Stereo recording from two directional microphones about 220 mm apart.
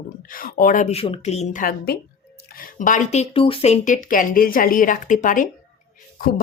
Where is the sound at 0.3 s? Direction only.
40° left (ahead or behind).